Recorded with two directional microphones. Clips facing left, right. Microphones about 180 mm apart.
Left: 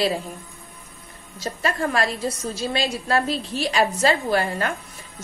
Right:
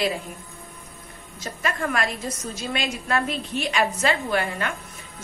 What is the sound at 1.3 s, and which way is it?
A woman's voice, 30° left (ahead or behind).